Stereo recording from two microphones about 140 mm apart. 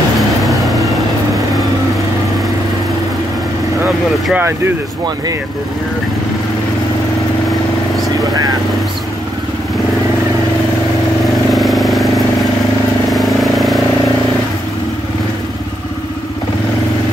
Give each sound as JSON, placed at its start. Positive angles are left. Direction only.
{"t": 0.4, "sound": "vehicle", "side_deg": 0}
{"t": 4.3, "sound": "speech", "side_deg": -15}
{"t": 8.2, "sound": "vehicle", "side_deg": -30}
{"t": 11.5, "sound": "vehicle", "side_deg": 0}
{"t": 13.1, "sound": "vehicle", "side_deg": 0}